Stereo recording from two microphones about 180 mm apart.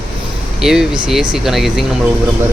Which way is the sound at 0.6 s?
5° right (ahead or behind).